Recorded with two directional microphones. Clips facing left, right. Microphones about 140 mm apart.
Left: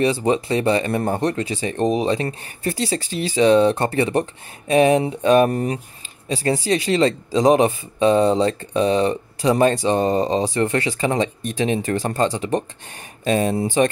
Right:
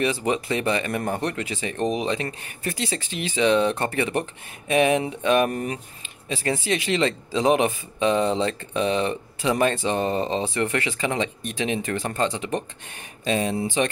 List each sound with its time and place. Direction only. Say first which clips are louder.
0.0 s speech: left 5 dB; 30° left (ahead or behind)